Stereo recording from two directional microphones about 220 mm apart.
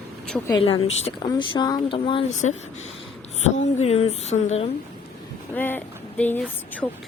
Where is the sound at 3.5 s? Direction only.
30° left (ahead or behind).